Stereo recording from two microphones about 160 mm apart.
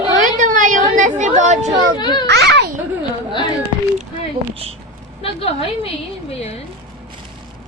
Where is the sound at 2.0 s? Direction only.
30° left (ahead or behind).